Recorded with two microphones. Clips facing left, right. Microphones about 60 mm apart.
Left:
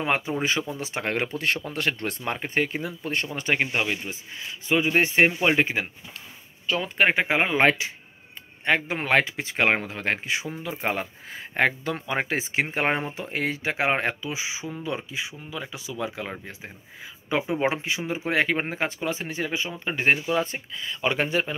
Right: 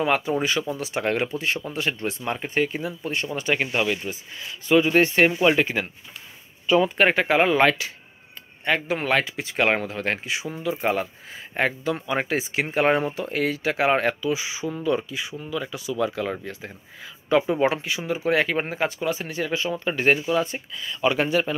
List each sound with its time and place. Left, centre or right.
0.0 s speech: left
1.7 s speech: left
7.0 s speech: centre
7.2 s speech: left